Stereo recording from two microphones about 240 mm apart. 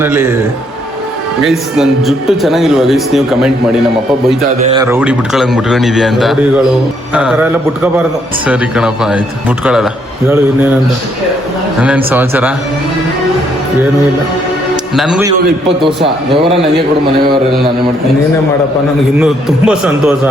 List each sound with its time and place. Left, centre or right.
0.0 s a man's voice: centre
1.4 s speech: centre
4.6 s speech: right
4.9 s speech: centre
10.2 s a man's voice: centre
11.8 s a man's voice: centre
14.9 s speech: centre
19.2 s speech: centre